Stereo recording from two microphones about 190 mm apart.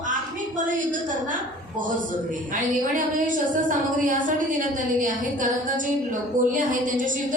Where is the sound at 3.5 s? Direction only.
45° right (ahead or behind).